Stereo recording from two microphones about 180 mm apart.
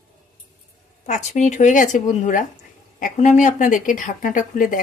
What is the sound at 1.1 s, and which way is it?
Speech, 40° left (ahead or behind).